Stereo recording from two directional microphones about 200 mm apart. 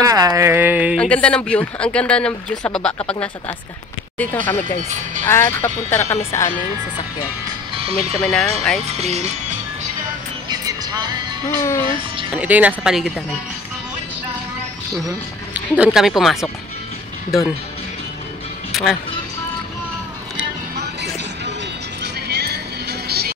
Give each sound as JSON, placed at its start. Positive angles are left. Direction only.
{"t": 0.0, "sound": "speech", "side_deg": -20}
{"t": 0.9, "sound": "a man's voice", "side_deg": 5}
{"t": 4.5, "sound": "speech", "side_deg": 10}
{"t": 7.7, "sound": "music", "side_deg": -30}
{"t": 8.2, "sound": "a man's voice", "side_deg": 5}
{"t": 8.9, "sound": "speech", "side_deg": -30}
{"t": 10.5, "sound": "music", "side_deg": -20}
{"t": 12.4, "sound": "speech", "side_deg": -10}
{"t": 15.5, "sound": "a man's voice", "side_deg": -5}
{"t": 18.7, "sound": "music", "side_deg": 0}
{"t": 20.7, "sound": "music", "side_deg": -55}